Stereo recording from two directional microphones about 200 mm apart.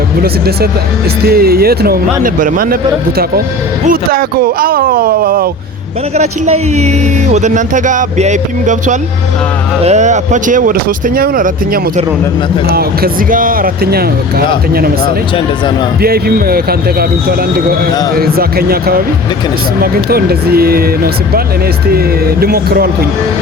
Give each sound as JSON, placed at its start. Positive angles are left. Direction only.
{"t": 0.2, "sound": "speech", "side_deg": -50}
{"t": 3.8, "sound": "speech", "side_deg": -45}
{"t": 6.1, "sound": "speech", "side_deg": -35}